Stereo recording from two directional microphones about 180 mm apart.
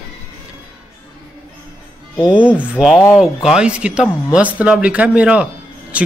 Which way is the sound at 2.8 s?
20° left (ahead or behind).